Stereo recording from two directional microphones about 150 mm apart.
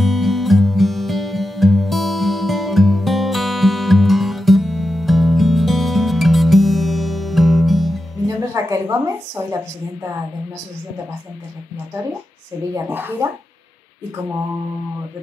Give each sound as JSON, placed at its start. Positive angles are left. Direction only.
{"t": 0.0, "sound": "music", "side_deg": 0}
{"t": 8.5, "sound": "a woman's voice", "side_deg": -20}
{"t": 12.7, "sound": "speech", "side_deg": -15}